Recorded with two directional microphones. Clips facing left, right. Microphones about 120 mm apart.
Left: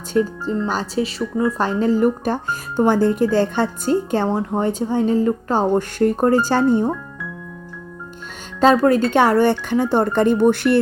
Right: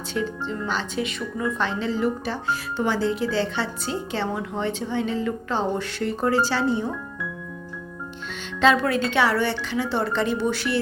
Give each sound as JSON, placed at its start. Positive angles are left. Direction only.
{"t": 0.1, "sound": "speech", "side_deg": 40}
{"t": 8.6, "sound": "speech", "side_deg": 40}